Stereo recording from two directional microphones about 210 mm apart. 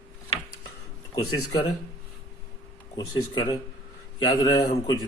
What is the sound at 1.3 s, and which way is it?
Speech, 20° left (ahead or behind).